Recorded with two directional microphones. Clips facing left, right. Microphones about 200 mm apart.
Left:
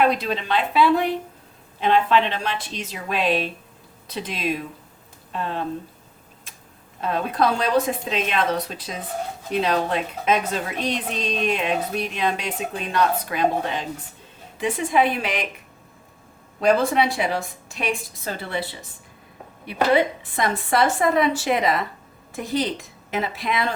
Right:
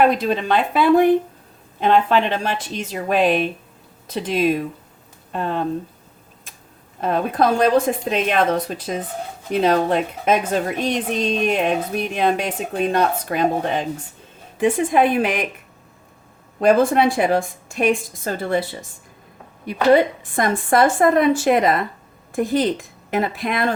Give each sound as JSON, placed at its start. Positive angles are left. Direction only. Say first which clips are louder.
{"t": 0.0, "sound": "a woman's voice", "louder": "right 4 dB", "side_deg": -50}
{"t": 7.0, "sound": "a woman's voice", "louder": "right 3 dB", "side_deg": -50}
{"t": 16.6, "sound": "a woman's voice", "louder": "right 4 dB", "side_deg": -50}